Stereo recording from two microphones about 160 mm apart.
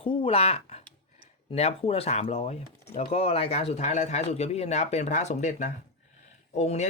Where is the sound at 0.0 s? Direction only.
35° left (ahead or behind).